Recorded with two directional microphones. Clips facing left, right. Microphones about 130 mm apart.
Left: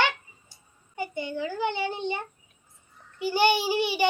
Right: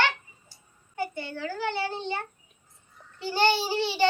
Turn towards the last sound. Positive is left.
turn(degrees=15)  # may be behind; listen again after turning